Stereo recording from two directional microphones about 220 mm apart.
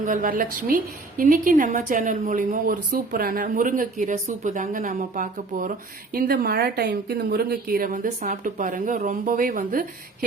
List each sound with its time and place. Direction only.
0.0 s a woman's voice: 35° right (ahead or behind)